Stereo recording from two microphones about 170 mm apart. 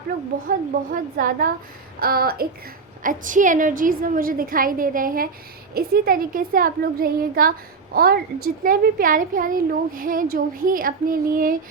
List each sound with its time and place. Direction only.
0.5 s a woman's voice: 55° right (ahead or behind)
3.0 s a woman's voice: 50° right (ahead or behind)